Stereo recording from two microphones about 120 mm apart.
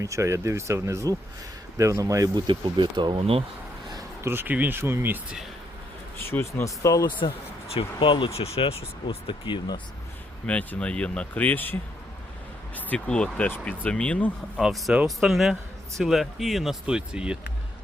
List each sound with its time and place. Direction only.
0.0 s speech: 25° right (ahead or behind); by 3.4 s 50° right (ahead or behind)
3.9 s a man's voice: 20° right (ahead or behind)
6.1 s speech: 20° left (ahead or behind)
7.7 s speech: 50° left (ahead or behind)
8.4 s speech: 55° left (ahead or behind)
10.4 s speech: 10° left (ahead or behind)
14.6 s speech: centre (ahead or behind)